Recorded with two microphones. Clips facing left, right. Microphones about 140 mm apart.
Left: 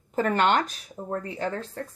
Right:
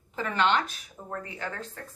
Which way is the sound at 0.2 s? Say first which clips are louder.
Left 4 dB; 45° left (ahead or behind).